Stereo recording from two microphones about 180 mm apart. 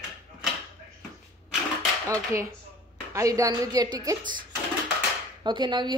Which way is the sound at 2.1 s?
15° right (ahead or behind).